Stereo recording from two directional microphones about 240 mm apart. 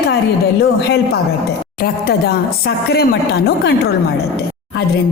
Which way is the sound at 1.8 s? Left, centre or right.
Left.